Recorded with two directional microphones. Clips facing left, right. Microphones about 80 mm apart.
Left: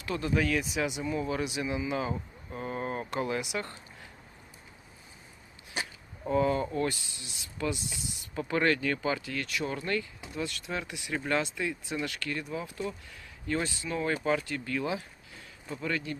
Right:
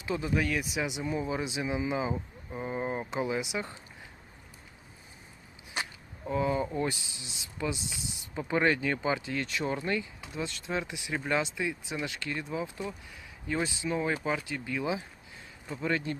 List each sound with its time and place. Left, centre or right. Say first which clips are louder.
0.0 s speech: left 1 dB; centre
6.2 s speech: left 2 dB; centre; by 16.1 s right